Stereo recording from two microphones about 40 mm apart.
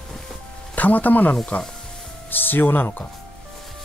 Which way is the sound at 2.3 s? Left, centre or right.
Left.